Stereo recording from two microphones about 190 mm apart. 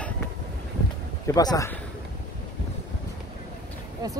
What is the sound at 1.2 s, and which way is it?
Speech, 20° left (ahead or behind).